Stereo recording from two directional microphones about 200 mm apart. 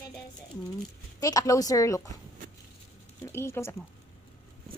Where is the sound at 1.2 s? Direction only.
15° left (ahead or behind).